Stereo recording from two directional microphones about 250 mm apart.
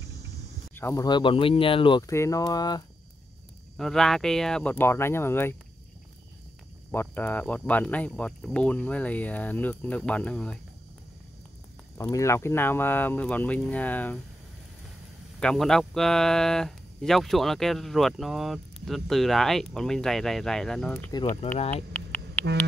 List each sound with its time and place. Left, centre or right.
0.7 s speech: centre
3.7 s speech: centre
6.9 s speech: centre
12.0 s speech: centre
15.4 s speech: centre
21.1 s speech: centre
21.9 s a sound: centre